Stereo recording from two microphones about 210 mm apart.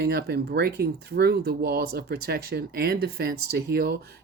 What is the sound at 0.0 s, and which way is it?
Speech, 50° right (ahead or behind).